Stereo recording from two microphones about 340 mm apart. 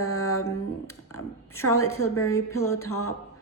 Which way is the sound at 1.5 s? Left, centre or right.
Centre.